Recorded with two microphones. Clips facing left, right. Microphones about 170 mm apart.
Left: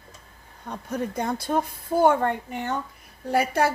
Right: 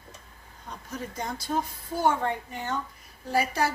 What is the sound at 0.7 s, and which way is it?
A woman's voice, 60° left (ahead or behind).